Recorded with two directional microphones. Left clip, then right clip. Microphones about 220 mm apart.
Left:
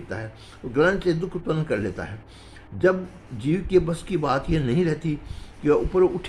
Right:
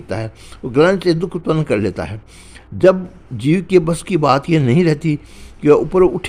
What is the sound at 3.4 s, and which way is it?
Speech, 35° right (ahead or behind).